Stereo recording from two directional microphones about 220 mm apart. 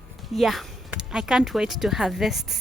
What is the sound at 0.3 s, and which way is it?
A woman's voice, centre (ahead or behind).